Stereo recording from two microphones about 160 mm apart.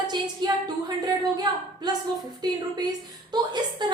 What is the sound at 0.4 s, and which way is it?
Speech, 25° right (ahead or behind).